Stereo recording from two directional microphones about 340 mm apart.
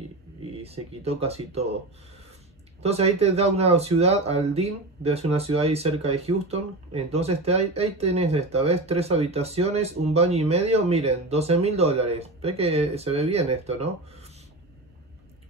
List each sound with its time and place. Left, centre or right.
0.6 s speech: centre
2.8 s speech: centre